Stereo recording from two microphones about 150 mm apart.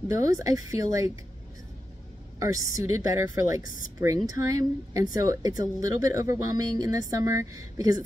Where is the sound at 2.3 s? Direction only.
20° right (ahead or behind).